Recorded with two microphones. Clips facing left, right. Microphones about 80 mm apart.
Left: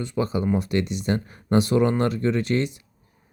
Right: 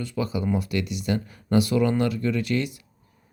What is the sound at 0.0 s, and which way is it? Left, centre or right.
Speech, left.